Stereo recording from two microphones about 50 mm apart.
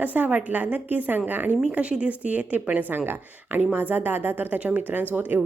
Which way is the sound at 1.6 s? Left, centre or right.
Right.